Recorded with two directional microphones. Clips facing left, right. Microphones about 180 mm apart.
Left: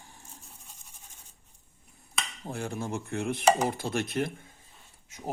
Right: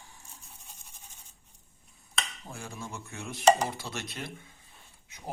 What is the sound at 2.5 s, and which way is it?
Speech, 60° left (ahead or behind).